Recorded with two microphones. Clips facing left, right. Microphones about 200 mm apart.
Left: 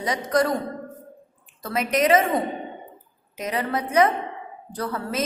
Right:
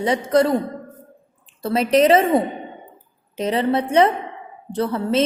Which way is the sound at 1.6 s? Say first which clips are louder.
Right 6 dB; 30° right (ahead or behind).